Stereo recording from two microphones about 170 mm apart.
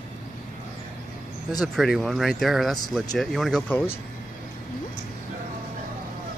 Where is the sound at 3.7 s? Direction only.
15° left (ahead or behind).